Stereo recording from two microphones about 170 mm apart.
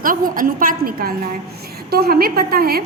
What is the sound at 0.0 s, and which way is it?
A woman's voice, 55° right (ahead or behind).